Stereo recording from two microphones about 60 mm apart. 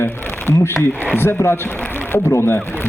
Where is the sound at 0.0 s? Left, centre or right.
Left.